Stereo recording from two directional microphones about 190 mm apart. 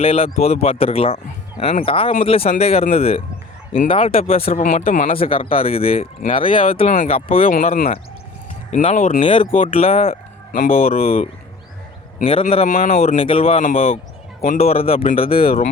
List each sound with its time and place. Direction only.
0.0 s speech: 30° left (ahead or behind)
5.1 s speech: 30° left (ahead or behind)
7.4 s speech: 45° left (ahead or behind)
9.2 s speech: 30° left (ahead or behind)